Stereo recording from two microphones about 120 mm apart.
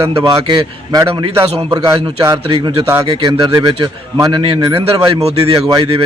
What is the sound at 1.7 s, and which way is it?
Speech, 30° right (ahead or behind).